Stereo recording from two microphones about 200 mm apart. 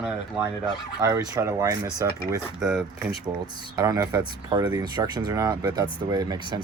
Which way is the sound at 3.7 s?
15° right (ahead or behind).